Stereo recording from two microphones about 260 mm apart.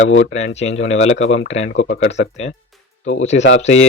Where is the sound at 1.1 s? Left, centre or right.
Left.